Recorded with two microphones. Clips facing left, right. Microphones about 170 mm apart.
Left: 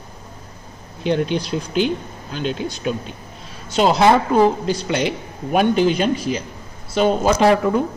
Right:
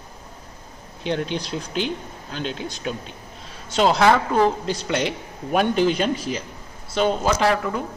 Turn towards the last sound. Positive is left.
turn(degrees=25)  # may be behind; listen again after turning